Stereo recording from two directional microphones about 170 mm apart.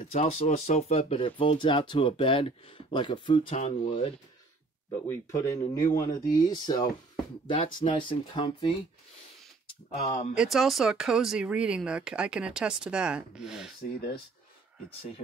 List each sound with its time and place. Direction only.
0.1 s speech: 40° left (ahead or behind)
5.0 s speech: 15° left (ahead or behind)
9.8 s speech: 60° left (ahead or behind)
10.3 s speech: centre (ahead or behind)